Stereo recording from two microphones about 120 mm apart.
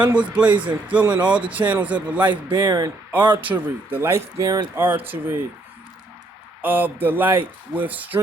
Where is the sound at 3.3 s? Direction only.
15° right (ahead or behind).